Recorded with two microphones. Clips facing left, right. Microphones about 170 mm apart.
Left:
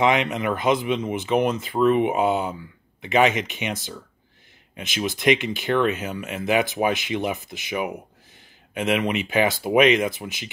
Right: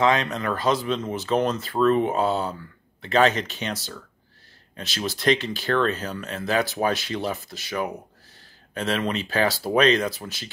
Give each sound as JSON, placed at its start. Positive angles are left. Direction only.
{"t": 0.0, "sound": "speech", "side_deg": 20}
{"t": 4.7, "sound": "speech", "side_deg": 15}